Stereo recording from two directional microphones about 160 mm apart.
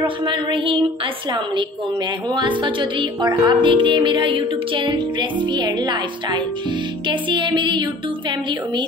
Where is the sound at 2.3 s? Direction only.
30° right (ahead or behind).